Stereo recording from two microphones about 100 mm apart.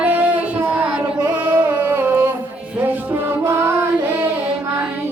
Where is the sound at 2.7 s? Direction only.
20° right (ahead or behind).